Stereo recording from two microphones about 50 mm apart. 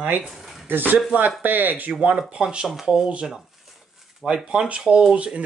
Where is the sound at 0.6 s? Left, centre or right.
Right.